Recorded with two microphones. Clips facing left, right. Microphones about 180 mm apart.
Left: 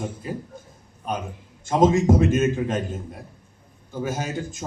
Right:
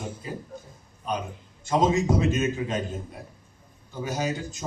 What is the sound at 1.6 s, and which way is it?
Speech, 50° left (ahead or behind).